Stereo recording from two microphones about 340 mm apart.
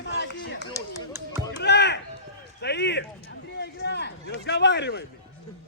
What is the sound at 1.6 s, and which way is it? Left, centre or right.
A man's voice, left.